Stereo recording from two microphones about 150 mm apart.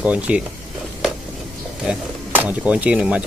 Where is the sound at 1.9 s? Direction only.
10° right (ahead or behind).